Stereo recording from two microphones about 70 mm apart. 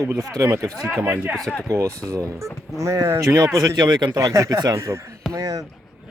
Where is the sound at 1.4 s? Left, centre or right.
Centre.